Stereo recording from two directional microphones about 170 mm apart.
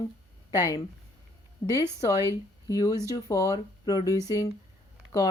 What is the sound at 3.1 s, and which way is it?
Speech, 20° left (ahead or behind).